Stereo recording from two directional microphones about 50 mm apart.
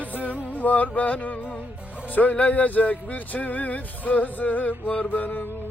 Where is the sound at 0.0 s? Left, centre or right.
Left.